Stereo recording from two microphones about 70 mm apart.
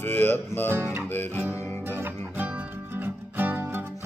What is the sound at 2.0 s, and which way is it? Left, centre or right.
Music, right.